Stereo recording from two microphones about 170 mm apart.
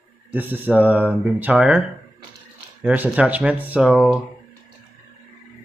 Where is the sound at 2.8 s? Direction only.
10° right (ahead or behind).